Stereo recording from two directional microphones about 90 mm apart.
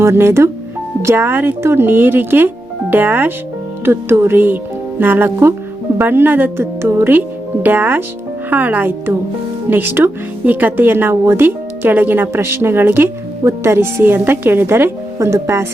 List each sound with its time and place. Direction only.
0.0 s speech: 30° right (ahead or behind)